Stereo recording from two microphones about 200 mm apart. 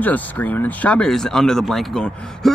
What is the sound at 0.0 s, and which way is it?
Speech, 10° left (ahead or behind).